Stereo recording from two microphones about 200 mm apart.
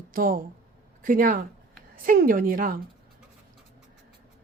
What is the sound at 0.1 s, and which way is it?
Speech, 45° right (ahead or behind).